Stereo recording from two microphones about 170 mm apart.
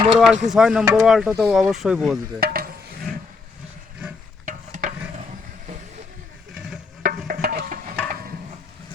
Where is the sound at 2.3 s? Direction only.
60° right (ahead or behind).